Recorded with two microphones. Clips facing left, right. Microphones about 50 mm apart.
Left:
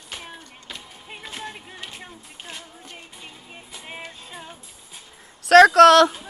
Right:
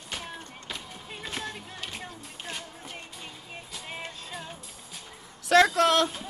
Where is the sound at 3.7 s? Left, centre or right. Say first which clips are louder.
Left 2 dB; centre.